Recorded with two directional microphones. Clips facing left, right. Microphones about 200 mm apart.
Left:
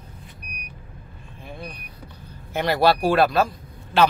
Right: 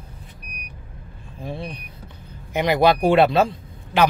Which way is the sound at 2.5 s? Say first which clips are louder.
Right 2 dB; 15° right (ahead or behind).